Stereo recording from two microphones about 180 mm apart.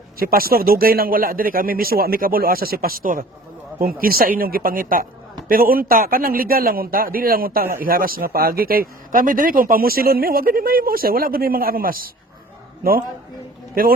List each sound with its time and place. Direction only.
0.2 s a man's voice: 55° right (ahead or behind)